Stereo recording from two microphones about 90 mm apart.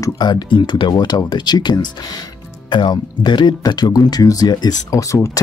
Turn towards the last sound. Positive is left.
turn(degrees=35)  # may be behind; listen again after turning